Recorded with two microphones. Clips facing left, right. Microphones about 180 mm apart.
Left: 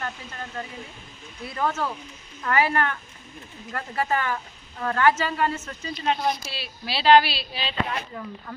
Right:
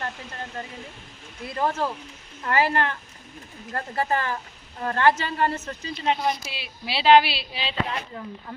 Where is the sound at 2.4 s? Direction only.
30° right (ahead or behind).